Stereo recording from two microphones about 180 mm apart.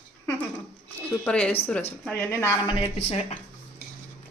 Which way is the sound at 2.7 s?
35° left (ahead or behind).